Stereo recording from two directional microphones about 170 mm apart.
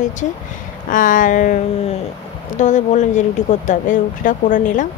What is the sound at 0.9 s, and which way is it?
Speech, 50° left (ahead or behind).